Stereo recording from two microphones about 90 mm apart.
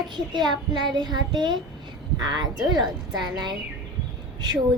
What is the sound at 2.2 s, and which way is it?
Child singing, 50° right (ahead or behind).